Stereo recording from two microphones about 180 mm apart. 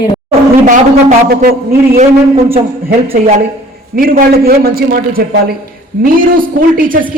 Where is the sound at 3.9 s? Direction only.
55° right (ahead or behind).